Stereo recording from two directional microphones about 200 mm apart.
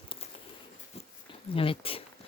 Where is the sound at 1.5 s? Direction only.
25° left (ahead or behind).